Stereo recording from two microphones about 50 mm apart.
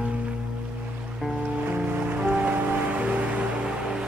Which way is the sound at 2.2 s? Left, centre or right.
Right.